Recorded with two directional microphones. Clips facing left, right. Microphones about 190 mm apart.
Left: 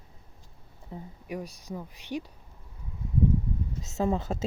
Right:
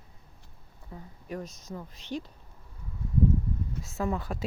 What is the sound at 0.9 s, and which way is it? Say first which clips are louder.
Speech: left 2 dB; 20° left (ahead or behind).